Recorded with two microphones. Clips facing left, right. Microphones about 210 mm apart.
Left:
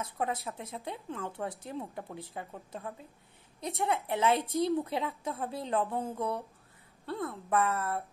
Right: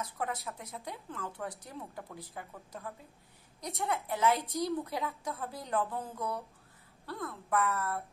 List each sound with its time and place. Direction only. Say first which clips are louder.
0.2 s speech: left 5 dB; 25° left (ahead or behind)